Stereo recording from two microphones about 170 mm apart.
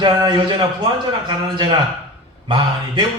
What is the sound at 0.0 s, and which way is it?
Speech, 30° right (ahead or behind).